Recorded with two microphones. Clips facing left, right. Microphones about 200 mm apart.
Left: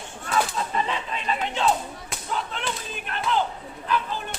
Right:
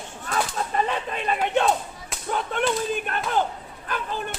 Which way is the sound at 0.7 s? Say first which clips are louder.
Right 2 dB; 50° right (ahead or behind).